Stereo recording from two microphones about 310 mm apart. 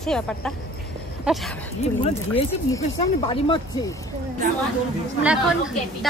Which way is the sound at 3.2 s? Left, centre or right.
Centre.